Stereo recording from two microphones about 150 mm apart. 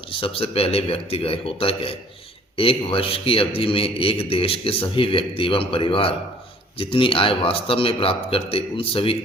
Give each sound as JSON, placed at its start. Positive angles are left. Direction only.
{"t": 0.1, "sound": "a man's voice", "side_deg": 40}